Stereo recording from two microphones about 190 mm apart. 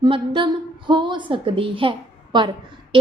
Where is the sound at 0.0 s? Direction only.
25° right (ahead or behind).